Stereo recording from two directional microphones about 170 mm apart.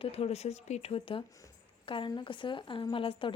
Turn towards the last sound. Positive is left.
turn(degrees=30)  # may be behind; listen again after turning